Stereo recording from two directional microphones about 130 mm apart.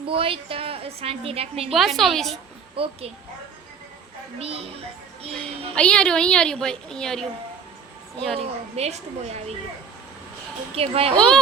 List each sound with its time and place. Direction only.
0.0 s a woman's voice: 45° right (ahead or behind)
1.7 s a woman's voice: centre (ahead or behind)
2.7 s a woman's voice: 45° right (ahead or behind)
4.4 s a woman's voice: 50° right (ahead or behind)
5.7 s a woman's voice: 10° left (ahead or behind)
8.4 s a woman's voice: 55° right (ahead or behind)
10.8 s a woman's voice: 50° right (ahead or behind)
11.1 s speech: 5° left (ahead or behind)